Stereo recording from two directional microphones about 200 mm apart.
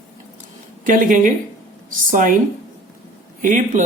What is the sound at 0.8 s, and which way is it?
Speech, 40° right (ahead or behind).